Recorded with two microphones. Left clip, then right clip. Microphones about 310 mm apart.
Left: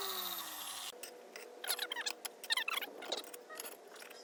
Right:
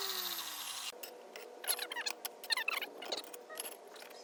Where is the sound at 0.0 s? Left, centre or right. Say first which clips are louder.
Right 2 dB; centre.